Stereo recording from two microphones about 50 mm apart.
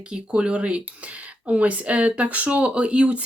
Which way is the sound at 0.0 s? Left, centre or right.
Right.